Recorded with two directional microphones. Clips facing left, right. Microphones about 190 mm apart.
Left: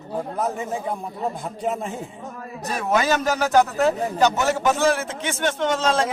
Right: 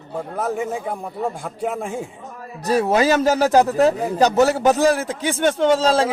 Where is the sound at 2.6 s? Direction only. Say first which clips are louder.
Right 5 dB; 35° right (ahead or behind).